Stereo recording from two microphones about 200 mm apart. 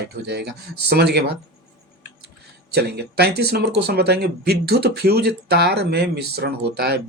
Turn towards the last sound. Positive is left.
turn(degrees=-55)  # may be behind; listen again after turning